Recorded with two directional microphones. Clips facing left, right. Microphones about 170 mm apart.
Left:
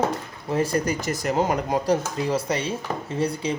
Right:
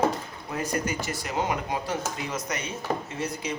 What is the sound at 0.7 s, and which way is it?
Speech, 35° left (ahead or behind).